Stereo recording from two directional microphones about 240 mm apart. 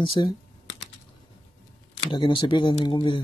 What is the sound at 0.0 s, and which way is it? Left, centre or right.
Speech, left.